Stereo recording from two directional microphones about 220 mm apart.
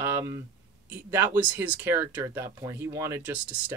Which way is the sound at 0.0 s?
10° right (ahead or behind).